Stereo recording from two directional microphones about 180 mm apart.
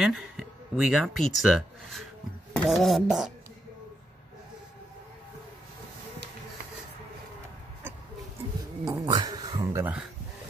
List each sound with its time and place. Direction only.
0.0 s speech: centre (ahead or behind)
2.5 s a sound: centre (ahead or behind)
9.0 s speech: 20° right (ahead or behind)